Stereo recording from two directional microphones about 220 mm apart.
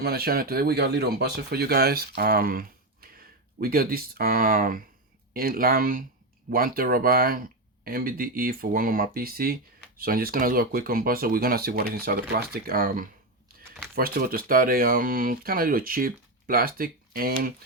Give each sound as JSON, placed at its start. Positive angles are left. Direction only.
{"t": 0.0, "sound": "speech", "side_deg": -45}